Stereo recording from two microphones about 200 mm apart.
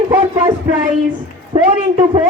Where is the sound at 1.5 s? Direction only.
30° right (ahead or behind).